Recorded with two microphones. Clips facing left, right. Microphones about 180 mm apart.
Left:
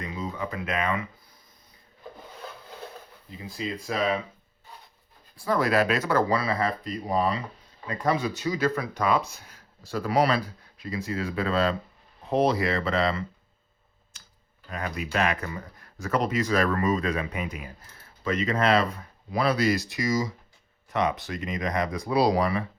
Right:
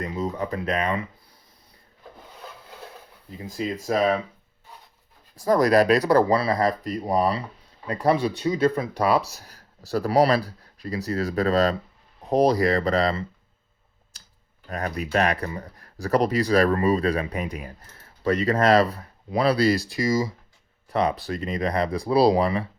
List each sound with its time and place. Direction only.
0.0 s speech: 40° right (ahead or behind)
3.4 s speech: 40° right (ahead or behind)
5.4 s speech: 40° right (ahead or behind)
14.1 s a sound: 35° right (ahead or behind)
14.7 s speech: 40° right (ahead or behind)